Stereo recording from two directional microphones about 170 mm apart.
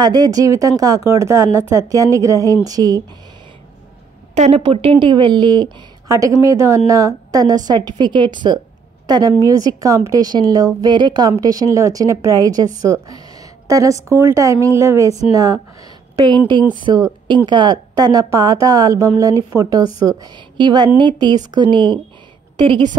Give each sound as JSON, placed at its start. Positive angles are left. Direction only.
{"t": 0.0, "sound": "a woman's voice", "side_deg": -25}
{"t": 4.4, "sound": "a woman's voice", "side_deg": -35}
{"t": 16.7, "sound": "a woman's voice", "side_deg": -25}